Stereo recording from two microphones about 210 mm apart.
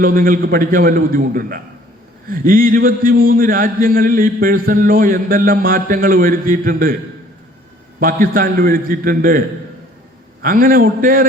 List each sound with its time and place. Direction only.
0.0 s a man's voice: 40° right (ahead or behind)
7.9 s a man's voice: 45° right (ahead or behind)
10.4 s a man's voice: 40° right (ahead or behind)